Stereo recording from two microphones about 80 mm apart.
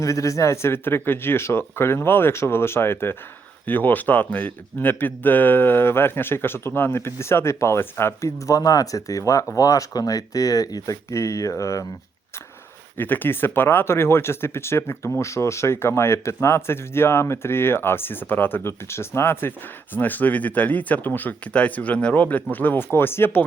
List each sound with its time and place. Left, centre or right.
0.0 s speech: left
11.1 s speech: left
13.0 s speech: left